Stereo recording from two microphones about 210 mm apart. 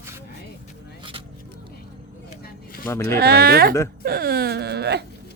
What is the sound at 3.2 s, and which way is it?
Speech, 45° right (ahead or behind).